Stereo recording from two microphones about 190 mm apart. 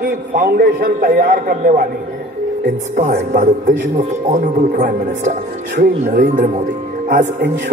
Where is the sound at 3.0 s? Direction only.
45° right (ahead or behind).